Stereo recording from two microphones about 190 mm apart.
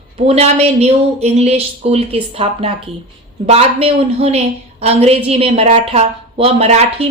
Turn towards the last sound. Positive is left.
turn(degrees=-35)  # may be behind; listen again after turning